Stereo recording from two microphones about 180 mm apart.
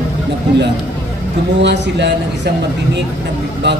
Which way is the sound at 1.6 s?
70° right (ahead or behind).